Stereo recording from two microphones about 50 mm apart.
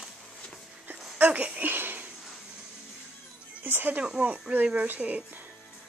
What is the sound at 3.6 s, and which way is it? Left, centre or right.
Speech, right.